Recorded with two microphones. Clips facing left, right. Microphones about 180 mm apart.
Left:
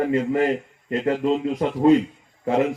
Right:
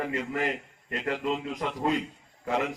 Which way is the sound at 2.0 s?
40° left (ahead or behind).